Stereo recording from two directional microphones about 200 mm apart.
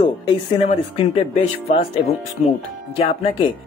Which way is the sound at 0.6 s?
30° left (ahead or behind).